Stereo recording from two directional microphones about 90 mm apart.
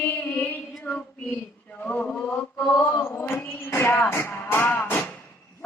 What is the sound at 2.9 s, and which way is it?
Music, 20° left (ahead or behind).